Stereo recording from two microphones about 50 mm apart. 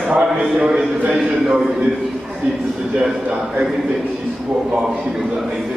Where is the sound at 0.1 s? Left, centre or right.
Right.